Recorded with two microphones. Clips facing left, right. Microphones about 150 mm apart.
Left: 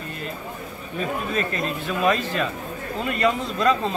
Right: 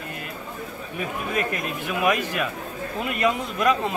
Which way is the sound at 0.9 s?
10° right (ahead or behind).